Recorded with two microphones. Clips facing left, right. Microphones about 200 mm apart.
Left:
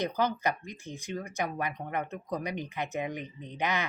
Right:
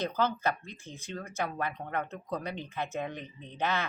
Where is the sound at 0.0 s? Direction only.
15° left (ahead or behind).